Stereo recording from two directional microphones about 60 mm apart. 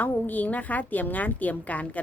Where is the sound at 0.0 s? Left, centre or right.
Left.